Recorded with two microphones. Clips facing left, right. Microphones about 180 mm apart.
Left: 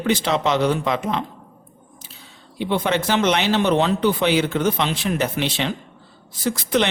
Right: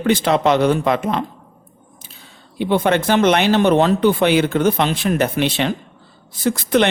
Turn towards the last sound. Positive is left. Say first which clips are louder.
# right 4 dB
turn(degrees=-55)  # may be behind; listen again after turning